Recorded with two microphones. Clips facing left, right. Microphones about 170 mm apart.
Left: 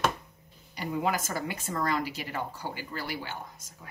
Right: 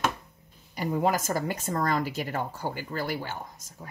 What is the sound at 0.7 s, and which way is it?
Speech, 45° right (ahead or behind).